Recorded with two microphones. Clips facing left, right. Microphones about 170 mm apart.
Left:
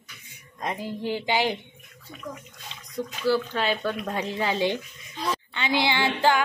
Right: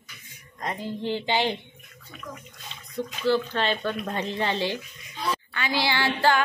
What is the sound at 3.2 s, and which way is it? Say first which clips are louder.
A woman's voice: even; 10° left (ahead or behind).